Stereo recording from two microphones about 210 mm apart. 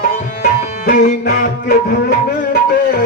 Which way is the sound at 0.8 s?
45° left (ahead or behind).